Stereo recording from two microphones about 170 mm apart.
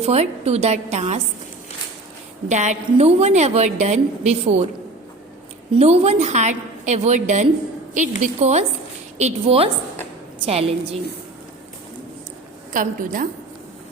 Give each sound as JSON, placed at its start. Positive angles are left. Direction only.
{"t": 0.0, "sound": "a woman's voice", "side_deg": -40}
{"t": 2.5, "sound": "a woman's voice", "side_deg": -45}
{"t": 5.7, "sound": "a woman's voice", "side_deg": -35}
{"t": 12.7, "sound": "a woman's voice", "side_deg": -50}